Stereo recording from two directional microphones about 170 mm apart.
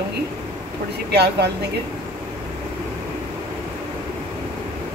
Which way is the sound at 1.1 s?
75° right (ahead or behind).